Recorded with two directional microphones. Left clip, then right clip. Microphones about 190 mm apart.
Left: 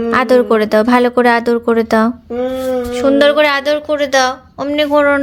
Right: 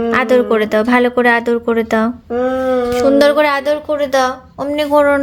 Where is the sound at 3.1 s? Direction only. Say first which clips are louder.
Left 2 dB; 5° right (ahead or behind).